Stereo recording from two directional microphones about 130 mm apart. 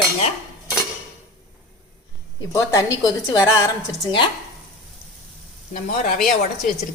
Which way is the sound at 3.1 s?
25° left (ahead or behind).